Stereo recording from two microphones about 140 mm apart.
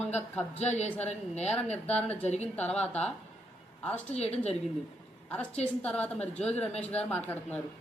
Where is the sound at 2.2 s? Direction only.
50° left (ahead or behind).